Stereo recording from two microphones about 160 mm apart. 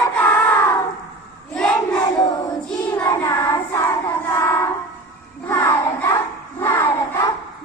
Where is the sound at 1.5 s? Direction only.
5° left (ahead or behind).